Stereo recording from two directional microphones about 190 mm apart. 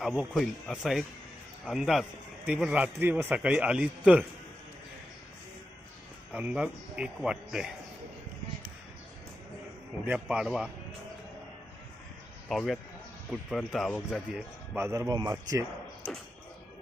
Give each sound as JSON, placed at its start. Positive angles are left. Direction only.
{"t": 0.0, "sound": "a man's voice", "side_deg": -5}
{"t": 6.3, "sound": "speech", "side_deg": -5}
{"t": 10.1, "sound": "speech", "side_deg": -5}
{"t": 12.5, "sound": "speech", "side_deg": 0}
{"t": 14.8, "sound": "a man's voice", "side_deg": -15}